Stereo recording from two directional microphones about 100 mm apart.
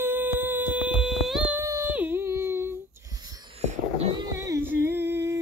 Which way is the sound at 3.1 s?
40° right (ahead or behind).